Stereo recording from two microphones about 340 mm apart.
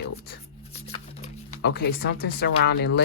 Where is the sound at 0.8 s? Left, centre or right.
Centre.